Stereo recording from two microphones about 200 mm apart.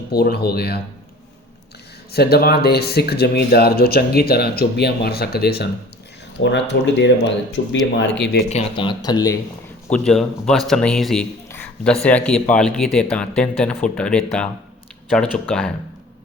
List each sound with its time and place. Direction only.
0.1 s speech: 50° left (ahead or behind)
2.1 s speech: 50° left (ahead or behind)
7.6 s speech: 45° left (ahead or behind)
7.9 s speech: 60° left (ahead or behind)
8.4 s speech: 30° left (ahead or behind)
9.9 s speech: 5° left (ahead or behind)